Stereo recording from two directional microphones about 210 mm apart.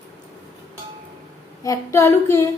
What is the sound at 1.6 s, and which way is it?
Speech, 15° left (ahead or behind).